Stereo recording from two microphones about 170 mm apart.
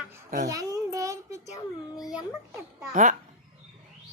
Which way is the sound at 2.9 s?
50° right (ahead or behind).